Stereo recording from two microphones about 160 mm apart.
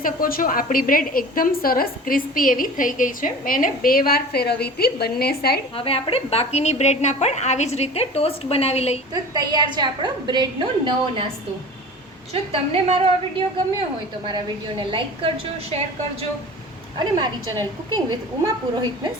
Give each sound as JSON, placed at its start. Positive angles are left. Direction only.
{"t": 0.0, "sound": "a woman's voice", "side_deg": 60}
{"t": 5.7, "sound": "a woman's voice", "side_deg": 35}
{"t": 9.1, "sound": "a woman's voice", "side_deg": -25}
{"t": 12.3, "sound": "a woman's voice", "side_deg": -40}
{"t": 17.0, "sound": "a woman's voice", "side_deg": -25}